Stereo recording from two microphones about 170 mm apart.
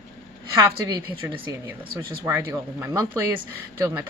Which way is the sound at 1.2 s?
10° right (ahead or behind).